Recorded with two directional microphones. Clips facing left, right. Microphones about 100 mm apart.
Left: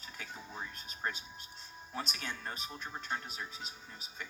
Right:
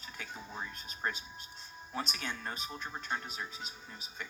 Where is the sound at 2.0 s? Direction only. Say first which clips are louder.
Right 2 dB; 25° right (ahead or behind).